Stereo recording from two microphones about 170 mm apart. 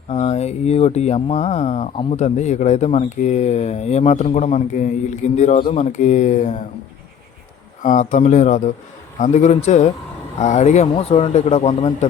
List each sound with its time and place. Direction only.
0.1 s speech: 40° left (ahead or behind)
7.8 s speech: 50° left (ahead or behind)